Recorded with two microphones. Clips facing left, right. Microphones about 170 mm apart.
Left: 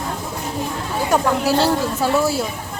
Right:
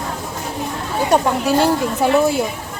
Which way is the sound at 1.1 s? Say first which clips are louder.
Right 1 dB; 20° right (ahead or behind).